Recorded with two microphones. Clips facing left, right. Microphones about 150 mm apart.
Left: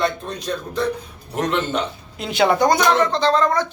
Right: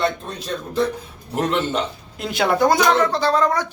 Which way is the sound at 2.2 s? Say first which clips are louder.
Left 1 dB; centre (ahead or behind).